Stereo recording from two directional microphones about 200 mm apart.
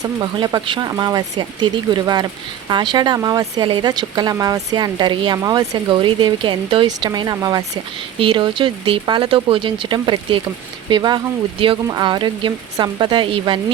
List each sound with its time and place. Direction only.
0.0 s speech: 20° right (ahead or behind)